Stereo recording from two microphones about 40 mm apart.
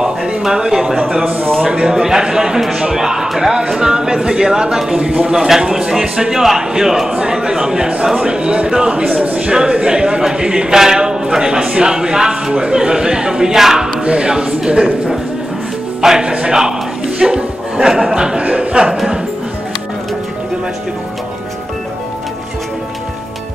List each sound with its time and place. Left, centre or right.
0.0 s a sound: centre
1.2 s speech: right
1.7 s a man's voice: centre
5.3 s a man's voice: centre; by 9.5 s right
9.5 s a man's voice: centre
14.0 s a man's voice: right
16.0 s a man's voice: centre
17.2 s chuckle: centre
18.4 s a sound: right